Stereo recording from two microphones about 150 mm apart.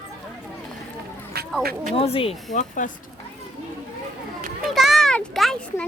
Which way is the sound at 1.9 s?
40° left (ahead or behind).